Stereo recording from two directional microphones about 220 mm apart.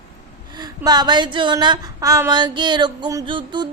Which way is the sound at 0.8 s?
20° right (ahead or behind).